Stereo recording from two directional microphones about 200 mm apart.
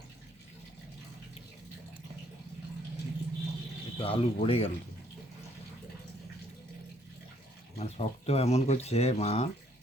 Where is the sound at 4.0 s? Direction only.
30° left (ahead or behind).